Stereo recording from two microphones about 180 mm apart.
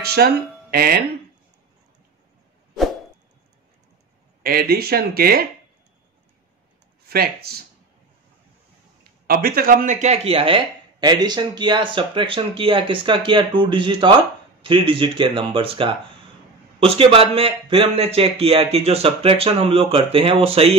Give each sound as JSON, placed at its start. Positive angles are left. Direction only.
{"t": 0.1, "sound": "speech", "side_deg": -60}
{"t": 4.4, "sound": "speech", "side_deg": -55}
{"t": 7.1, "sound": "speech", "side_deg": -60}
{"t": 9.3, "sound": "speech", "side_deg": -55}